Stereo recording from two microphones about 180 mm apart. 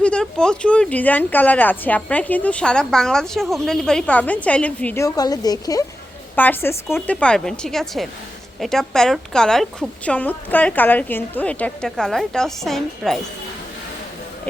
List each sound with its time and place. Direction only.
0.0 s speech: 5° left (ahead or behind)
5.0 s a woman's voice: 20° left (ahead or behind)
6.3 s a woman's voice: 10° left (ahead or behind)